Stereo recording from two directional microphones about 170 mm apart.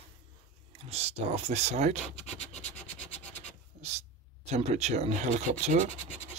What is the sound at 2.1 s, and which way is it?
Scratch, 40° left (ahead or behind).